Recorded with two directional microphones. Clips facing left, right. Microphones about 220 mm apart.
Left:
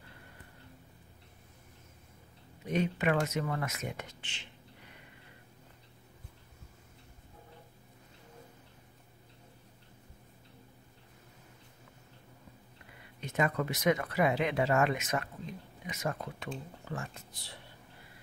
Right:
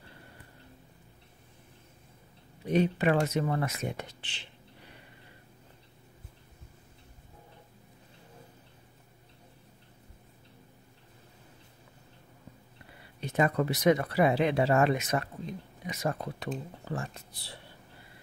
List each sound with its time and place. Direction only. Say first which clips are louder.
2.6 s speech: right 5 dB; 35° right (ahead or behind)
13.2 s speech: right 4 dB; 35° right (ahead or behind)